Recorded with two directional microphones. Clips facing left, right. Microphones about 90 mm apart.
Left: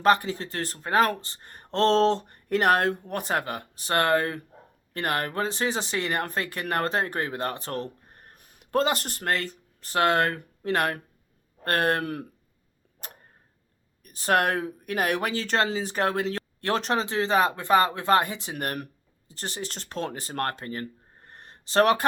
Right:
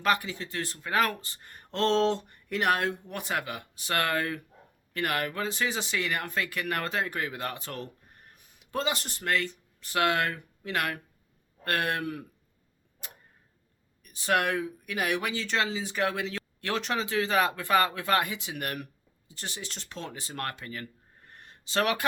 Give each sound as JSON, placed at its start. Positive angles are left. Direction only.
{"t": 0.0, "sound": "speech", "side_deg": 35}
{"t": 14.0, "sound": "speech", "side_deg": 45}